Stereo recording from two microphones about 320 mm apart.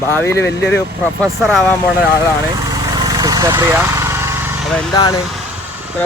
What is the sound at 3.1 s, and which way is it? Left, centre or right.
Vehicle, centre.